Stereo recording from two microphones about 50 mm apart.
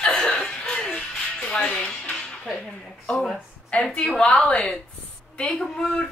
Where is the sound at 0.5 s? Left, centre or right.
Centre.